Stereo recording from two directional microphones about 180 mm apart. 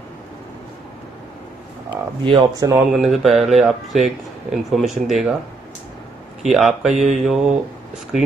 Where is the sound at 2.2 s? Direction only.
25° right (ahead or behind).